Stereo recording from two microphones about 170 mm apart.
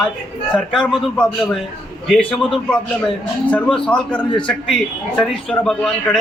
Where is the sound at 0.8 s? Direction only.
5° left (ahead or behind).